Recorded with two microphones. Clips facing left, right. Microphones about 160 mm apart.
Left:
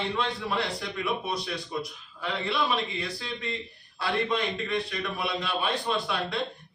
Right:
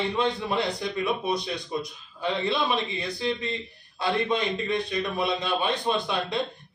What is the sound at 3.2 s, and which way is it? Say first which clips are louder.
A man's voice: right 6 dB; 20° right (ahead or behind).